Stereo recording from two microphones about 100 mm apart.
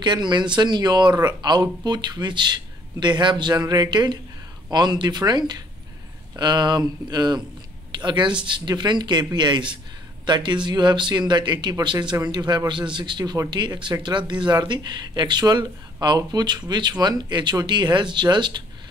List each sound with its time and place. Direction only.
0.0 s speech: 50° right (ahead or behind)